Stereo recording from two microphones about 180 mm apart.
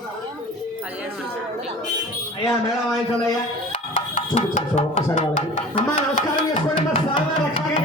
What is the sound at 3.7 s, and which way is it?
Music, 40° left (ahead or behind).